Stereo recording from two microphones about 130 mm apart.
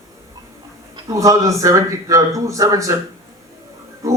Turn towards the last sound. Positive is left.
turn(degrees=-25)  # may be behind; listen again after turning